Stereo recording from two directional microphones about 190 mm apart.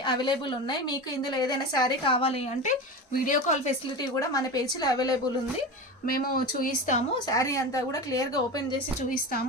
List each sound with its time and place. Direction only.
0.0 s a woman's voice: 25° left (ahead or behind)
2.6 s speech: 45° left (ahead or behind)
4.1 s a woman's voice: 15° left (ahead or behind)
6.1 s speech: 50° left (ahead or behind)
7.3 s speech: 15° left (ahead or behind)
9.0 s speech: 45° left (ahead or behind)